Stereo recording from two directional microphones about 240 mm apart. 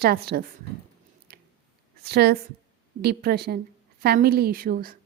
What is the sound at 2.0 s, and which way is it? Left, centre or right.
A woman's voice, right.